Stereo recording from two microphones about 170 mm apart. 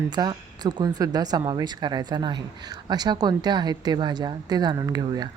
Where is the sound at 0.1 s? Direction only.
25° right (ahead or behind).